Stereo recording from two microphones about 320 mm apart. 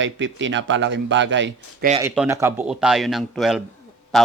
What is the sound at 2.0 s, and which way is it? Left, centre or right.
A man's voice, centre.